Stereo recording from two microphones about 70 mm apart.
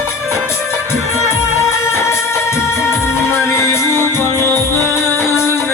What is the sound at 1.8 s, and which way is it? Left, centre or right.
Music, left.